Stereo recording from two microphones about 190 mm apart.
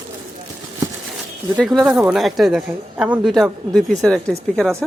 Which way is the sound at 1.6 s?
Centre (ahead or behind).